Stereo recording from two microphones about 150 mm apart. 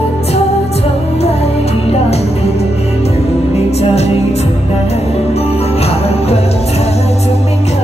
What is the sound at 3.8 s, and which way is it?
Music, 45° left (ahead or behind).